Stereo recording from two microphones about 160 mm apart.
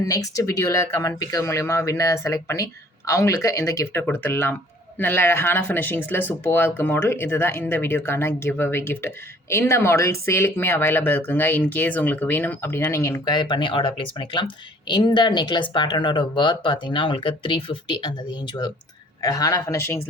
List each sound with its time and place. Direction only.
0.0 s speech: 20° left (ahead or behind)